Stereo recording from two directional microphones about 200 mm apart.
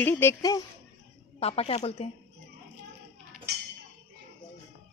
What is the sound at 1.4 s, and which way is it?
Speech, 30° left (ahead or behind).